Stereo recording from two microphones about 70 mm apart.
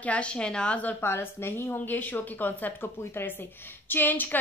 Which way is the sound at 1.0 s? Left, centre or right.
Left.